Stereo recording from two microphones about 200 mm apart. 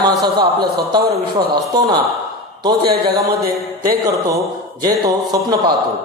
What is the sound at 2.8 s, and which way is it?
Speech, 50° right (ahead or behind).